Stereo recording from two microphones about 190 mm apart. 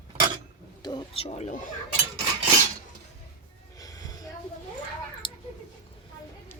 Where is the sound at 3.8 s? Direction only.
20° left (ahead or behind).